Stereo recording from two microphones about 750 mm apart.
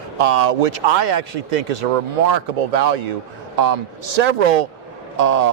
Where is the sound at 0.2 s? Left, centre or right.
Right.